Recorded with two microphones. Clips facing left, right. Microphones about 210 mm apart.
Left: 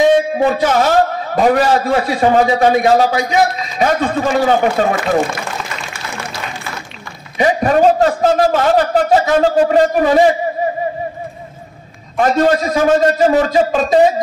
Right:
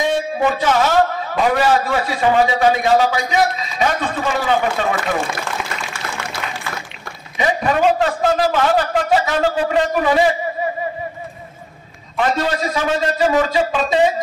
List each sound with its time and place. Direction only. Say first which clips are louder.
0.4 s a man's voice: left 3 dB; 35° left (ahead or behind)
7.3 s a man's voice: left 5 dB; 40° left (ahead or behind)
12.2 s a man's voice: left 6 dB; 45° left (ahead or behind)